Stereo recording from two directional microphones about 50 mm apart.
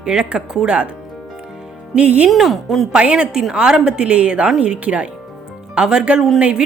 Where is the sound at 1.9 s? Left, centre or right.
Right.